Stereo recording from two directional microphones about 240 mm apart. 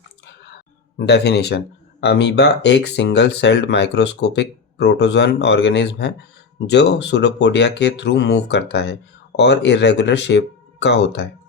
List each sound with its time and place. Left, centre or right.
0.9 s speech: left